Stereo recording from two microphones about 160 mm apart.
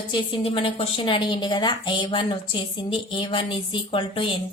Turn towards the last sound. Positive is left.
turn(degrees=35)  # may be behind; listen again after turning